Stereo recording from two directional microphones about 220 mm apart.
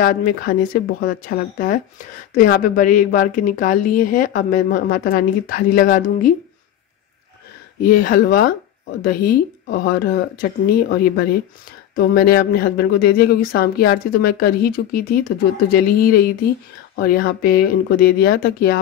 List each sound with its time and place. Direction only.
0.0 s a woman's voice: 40° left (ahead or behind)
8.0 s a woman's voice: 40° left (ahead or behind)